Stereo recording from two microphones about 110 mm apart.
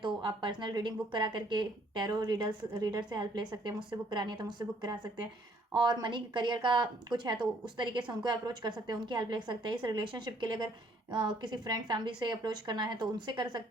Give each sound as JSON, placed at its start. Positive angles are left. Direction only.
{"t": 0.0, "sound": "a woman's voice", "side_deg": -45}